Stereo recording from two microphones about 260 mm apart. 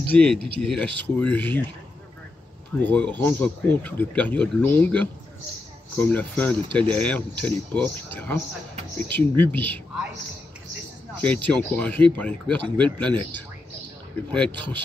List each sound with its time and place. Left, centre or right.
0.1 s speech: centre
2.8 s speech: centre
11.1 s speech: centre